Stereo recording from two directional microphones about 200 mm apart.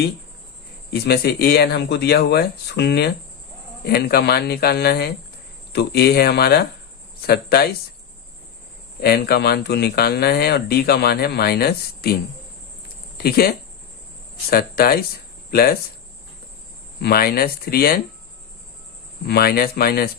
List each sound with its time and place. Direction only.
0.9 s speech: 55° left (ahead or behind)
9.0 s speech: 50° left (ahead or behind)
13.1 s speech: 50° left (ahead or behind)
17.0 s speech: 50° left (ahead or behind)
19.2 s speech: 50° left (ahead or behind)